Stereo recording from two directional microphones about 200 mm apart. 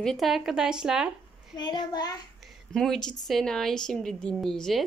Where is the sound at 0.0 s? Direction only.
Centre (ahead or behind).